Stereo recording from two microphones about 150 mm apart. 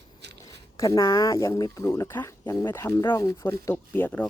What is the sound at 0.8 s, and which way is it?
Speech, 25° left (ahead or behind).